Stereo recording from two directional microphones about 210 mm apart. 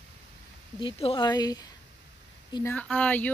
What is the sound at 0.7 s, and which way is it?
A woman's voice, 25° left (ahead or behind).